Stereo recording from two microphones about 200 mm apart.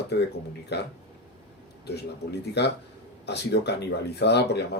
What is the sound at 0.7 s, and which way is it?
Speech, 55° left (ahead or behind).